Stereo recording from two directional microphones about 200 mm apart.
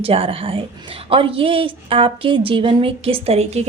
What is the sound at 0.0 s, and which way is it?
A woman's voice, 30° right (ahead or behind).